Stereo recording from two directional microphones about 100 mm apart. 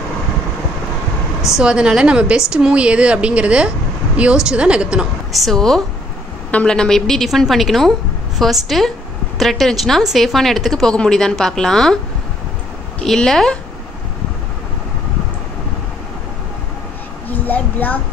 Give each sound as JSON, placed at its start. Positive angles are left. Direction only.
{"t": 1.5, "sound": "a woman's voice", "side_deg": -10}
{"t": 13.0, "sound": "speech", "side_deg": 5}
{"t": 17.3, "sound": "a sound", "side_deg": 15}